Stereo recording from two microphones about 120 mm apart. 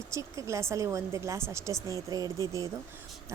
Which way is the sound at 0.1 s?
25° right (ahead or behind).